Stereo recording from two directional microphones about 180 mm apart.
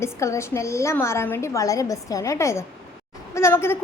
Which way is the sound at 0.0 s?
15° left (ahead or behind).